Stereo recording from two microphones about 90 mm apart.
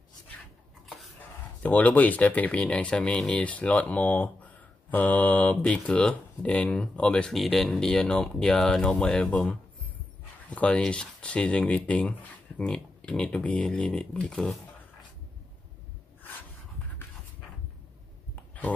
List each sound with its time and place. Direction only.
1.6 s speech: 15° left (ahead or behind)